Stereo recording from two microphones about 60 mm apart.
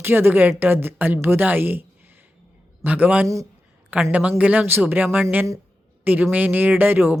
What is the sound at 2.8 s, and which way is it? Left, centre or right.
Speech, right.